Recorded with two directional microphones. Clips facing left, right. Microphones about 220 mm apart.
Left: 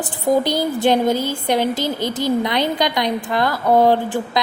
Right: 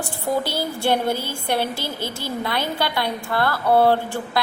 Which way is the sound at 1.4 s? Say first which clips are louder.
Left 4 dB; 15° left (ahead or behind).